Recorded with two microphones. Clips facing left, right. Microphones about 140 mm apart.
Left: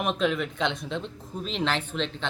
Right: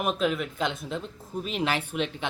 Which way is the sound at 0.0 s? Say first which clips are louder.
Left 1 dB; 5° right (ahead or behind).